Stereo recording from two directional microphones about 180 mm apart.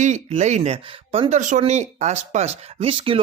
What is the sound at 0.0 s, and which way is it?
Speech, 40° right (ahead or behind).